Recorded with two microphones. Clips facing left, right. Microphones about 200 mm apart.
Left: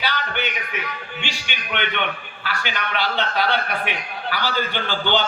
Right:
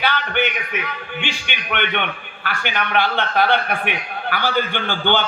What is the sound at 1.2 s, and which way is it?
A man's voice, 55° right (ahead or behind).